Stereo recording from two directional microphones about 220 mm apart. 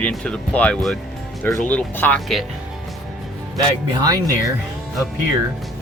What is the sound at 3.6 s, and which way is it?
Speech, 15° right (ahead or behind).